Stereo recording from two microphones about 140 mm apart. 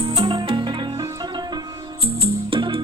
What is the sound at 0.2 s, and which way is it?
Music, 35° right (ahead or behind).